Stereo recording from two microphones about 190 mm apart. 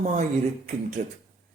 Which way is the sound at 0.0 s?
40° right (ahead or behind).